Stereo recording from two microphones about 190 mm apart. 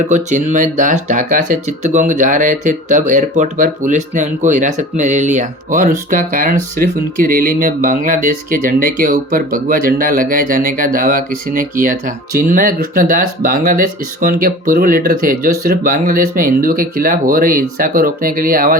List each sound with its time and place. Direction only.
0.1 s speech: 40° right (ahead or behind)